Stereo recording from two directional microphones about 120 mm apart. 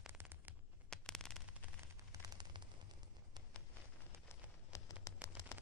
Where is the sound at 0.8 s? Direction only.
5° left (ahead or behind).